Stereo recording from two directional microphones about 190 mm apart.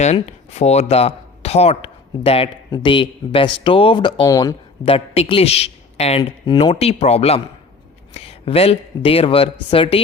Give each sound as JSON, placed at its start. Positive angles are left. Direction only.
{"t": 0.0, "sound": "speech", "side_deg": 35}
{"t": 4.9, "sound": "speech", "side_deg": 30}
{"t": 8.1, "sound": "a sound", "side_deg": 30}
{"t": 9.0, "sound": "speech", "side_deg": 30}